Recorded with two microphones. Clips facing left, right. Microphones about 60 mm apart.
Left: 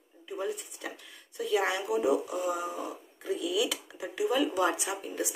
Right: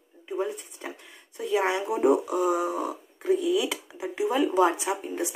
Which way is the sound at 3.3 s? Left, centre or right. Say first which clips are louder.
Right 6 dB; right.